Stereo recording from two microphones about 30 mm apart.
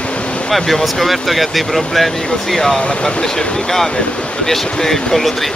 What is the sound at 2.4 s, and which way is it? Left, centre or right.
Speech, centre.